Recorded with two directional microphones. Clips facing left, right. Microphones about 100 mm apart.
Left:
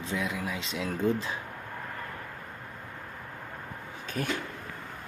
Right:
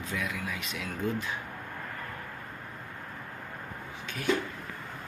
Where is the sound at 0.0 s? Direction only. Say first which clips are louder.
Left 2 dB; 25° left (ahead or behind).